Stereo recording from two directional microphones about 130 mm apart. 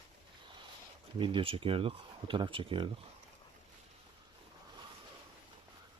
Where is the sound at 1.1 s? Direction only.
40° right (ahead or behind).